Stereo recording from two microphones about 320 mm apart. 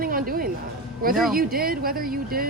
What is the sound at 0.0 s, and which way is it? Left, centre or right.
Music, right.